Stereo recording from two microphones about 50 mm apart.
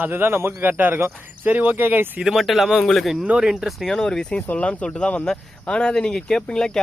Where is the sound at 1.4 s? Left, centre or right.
Right.